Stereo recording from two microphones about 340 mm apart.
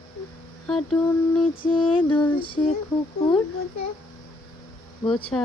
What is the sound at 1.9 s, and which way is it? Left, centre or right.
Lullaby, centre.